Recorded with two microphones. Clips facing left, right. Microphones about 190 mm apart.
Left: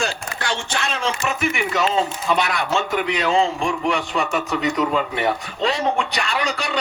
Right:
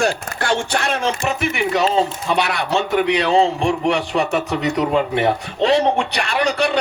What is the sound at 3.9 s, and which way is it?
Speech, 40° right (ahead or behind).